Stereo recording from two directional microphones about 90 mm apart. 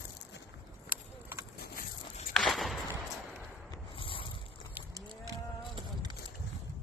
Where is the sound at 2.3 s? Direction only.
Centre (ahead or behind).